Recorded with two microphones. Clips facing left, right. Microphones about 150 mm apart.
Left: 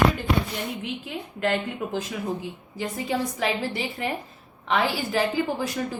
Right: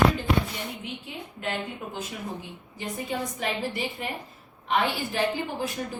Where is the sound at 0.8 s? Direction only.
90° left.